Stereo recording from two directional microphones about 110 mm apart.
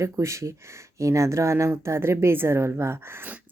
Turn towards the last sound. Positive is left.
turn(degrees=-20)  # may be behind; listen again after turning